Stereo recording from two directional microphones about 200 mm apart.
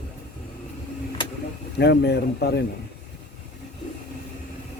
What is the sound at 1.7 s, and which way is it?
Speech, 55° left (ahead or behind).